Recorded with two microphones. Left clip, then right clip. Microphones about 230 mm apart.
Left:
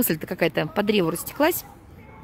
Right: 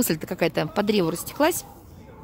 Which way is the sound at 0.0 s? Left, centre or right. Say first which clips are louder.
Left 1 dB; centre.